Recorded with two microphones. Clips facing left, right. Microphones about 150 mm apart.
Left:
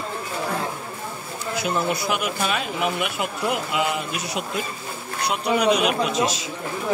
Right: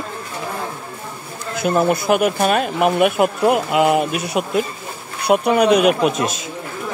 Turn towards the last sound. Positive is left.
turn(degrees=-50)  # may be behind; listen again after turning